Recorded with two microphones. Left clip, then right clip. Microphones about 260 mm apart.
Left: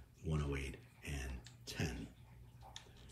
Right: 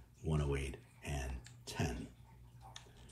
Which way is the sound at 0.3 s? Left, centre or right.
Centre.